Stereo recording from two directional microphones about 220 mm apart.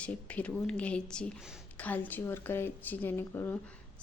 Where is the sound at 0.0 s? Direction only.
5° left (ahead or behind).